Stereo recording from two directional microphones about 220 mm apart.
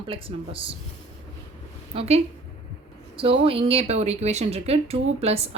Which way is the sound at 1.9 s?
30° right (ahead or behind).